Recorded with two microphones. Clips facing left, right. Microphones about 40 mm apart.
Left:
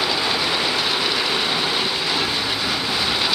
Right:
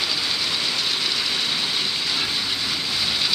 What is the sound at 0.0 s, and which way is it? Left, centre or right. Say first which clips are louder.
Train: left 4 dB; centre.